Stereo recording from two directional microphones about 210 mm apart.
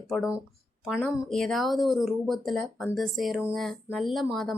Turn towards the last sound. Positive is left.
turn(degrees=0)  # may be behind; listen again after turning